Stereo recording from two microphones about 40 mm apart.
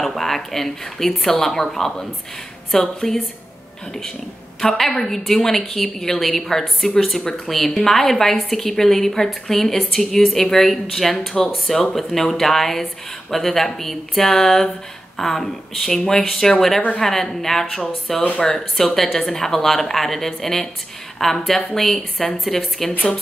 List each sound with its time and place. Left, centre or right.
0.0 s a woman's voice: centre
4.6 s a woman's voice: centre
11.1 s a woman's voice: centre